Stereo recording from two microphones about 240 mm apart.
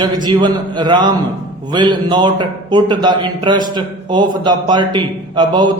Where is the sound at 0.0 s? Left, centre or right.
Centre.